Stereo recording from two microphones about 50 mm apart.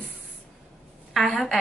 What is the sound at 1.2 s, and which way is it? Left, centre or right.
Speech, centre.